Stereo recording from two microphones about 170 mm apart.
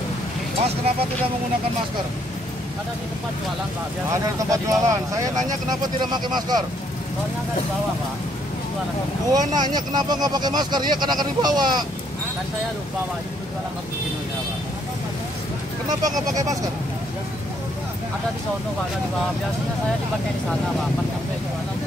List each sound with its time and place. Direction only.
4.1 s speech: 20° right (ahead or behind)
9.3 s speech: 25° right (ahead or behind)
15.9 s speech: 20° right (ahead or behind)